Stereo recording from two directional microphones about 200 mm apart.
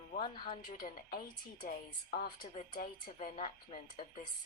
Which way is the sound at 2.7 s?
40° left (ahead or behind).